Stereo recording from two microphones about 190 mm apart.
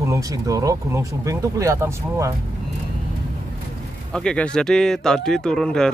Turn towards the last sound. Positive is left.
turn(degrees=5)  # may be behind; listen again after turning